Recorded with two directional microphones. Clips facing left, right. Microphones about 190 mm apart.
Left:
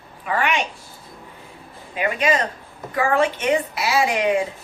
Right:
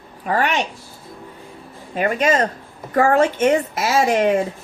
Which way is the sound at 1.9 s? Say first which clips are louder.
Right 3 dB; 45° right (ahead or behind).